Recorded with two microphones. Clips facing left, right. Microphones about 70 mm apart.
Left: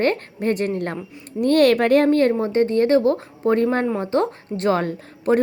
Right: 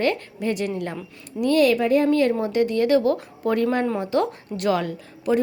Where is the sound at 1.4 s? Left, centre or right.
Left.